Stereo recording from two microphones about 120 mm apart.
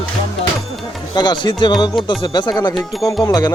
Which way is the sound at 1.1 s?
40° left (ahead or behind).